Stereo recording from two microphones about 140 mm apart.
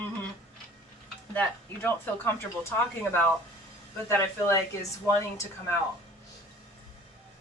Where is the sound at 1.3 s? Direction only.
10° left (ahead or behind).